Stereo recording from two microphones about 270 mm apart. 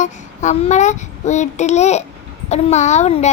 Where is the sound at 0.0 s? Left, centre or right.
Left.